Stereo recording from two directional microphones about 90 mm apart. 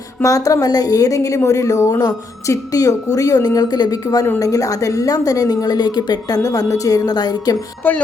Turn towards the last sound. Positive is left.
turn(degrees=20)  # may be behind; listen again after turning